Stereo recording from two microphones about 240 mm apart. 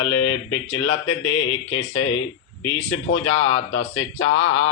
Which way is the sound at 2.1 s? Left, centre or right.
Left.